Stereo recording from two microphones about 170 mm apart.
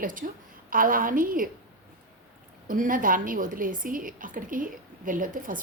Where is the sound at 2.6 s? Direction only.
55° right (ahead or behind).